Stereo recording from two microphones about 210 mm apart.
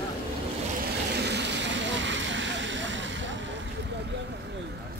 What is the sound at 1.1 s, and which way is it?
Vehicle, 55° right (ahead or behind).